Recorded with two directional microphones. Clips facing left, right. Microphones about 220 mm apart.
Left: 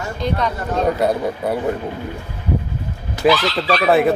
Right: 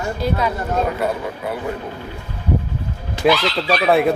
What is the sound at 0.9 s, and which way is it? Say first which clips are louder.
Speech: left 4 dB; 40° left (ahead or behind).